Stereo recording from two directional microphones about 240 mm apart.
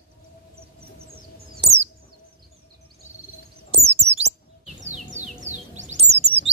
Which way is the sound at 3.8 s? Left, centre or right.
Right.